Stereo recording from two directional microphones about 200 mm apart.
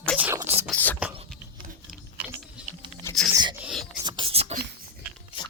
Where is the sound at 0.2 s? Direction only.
10° right (ahead or behind).